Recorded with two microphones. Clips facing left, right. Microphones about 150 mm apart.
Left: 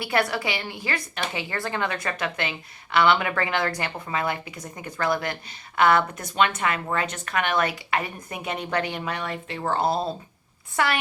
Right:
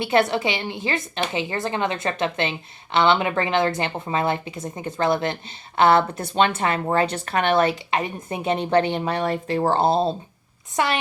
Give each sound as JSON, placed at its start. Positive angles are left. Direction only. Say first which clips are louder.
{"t": 0.0, "sound": "a woman's voice", "louder": "right 5 dB", "side_deg": -20}